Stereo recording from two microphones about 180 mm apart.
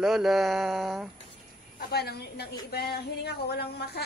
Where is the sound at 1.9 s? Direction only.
60° left (ahead or behind).